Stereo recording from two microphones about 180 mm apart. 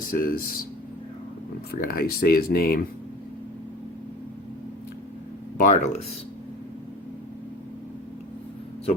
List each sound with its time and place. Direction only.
0.1 s speech: 55° left (ahead or behind)
1.7 s speech: 60° left (ahead or behind)
5.5 s speech: 45° left (ahead or behind)